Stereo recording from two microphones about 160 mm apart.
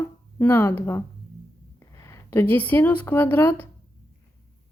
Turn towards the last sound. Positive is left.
turn(degrees=15)  # may be behind; listen again after turning